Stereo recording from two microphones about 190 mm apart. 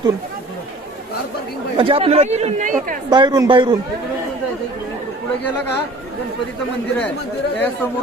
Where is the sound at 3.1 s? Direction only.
20° right (ahead or behind).